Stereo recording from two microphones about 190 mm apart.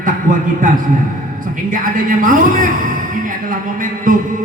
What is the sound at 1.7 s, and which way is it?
Speech, 45° right (ahead or behind).